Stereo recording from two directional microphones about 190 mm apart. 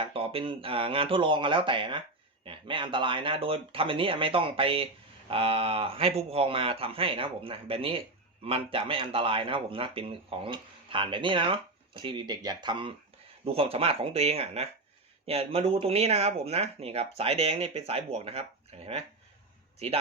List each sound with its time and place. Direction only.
0.0 s speech: 30° right (ahead or behind)